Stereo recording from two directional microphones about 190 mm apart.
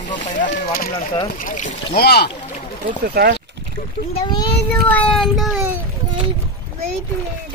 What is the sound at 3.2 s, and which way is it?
Speech, 55° right (ahead or behind).